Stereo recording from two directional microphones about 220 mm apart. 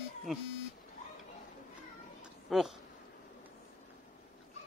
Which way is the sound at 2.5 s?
Centre (ahead or behind).